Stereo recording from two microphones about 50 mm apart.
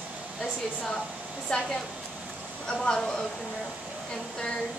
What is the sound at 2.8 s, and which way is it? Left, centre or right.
Speech, centre.